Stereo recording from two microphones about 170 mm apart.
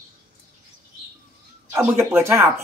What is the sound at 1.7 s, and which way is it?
Speech, 15° right (ahead or behind).